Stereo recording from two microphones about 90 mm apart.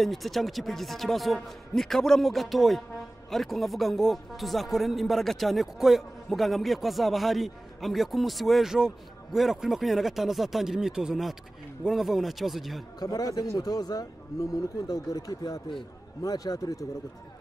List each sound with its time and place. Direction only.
0.0 s speech: centre (ahead or behind)
13.0 s speech: 45° left (ahead or behind)